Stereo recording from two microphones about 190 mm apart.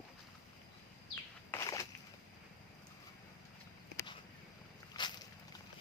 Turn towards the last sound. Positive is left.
turn(degrees=20)  # may be behind; listen again after turning